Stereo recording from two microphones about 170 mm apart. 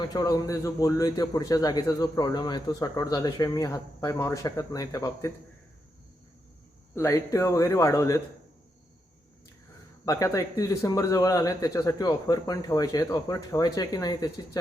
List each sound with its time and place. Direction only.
0.1 s a man's voice: 20° left (ahead or behind)
6.9 s a man's voice: 15° left (ahead or behind)
10.1 s a man's voice: 20° left (ahead or behind)